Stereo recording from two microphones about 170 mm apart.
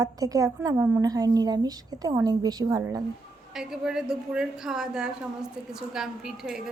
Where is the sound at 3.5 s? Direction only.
5° right (ahead or behind).